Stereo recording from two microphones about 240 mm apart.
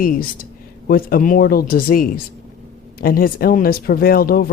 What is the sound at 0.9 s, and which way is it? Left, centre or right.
Speech, left.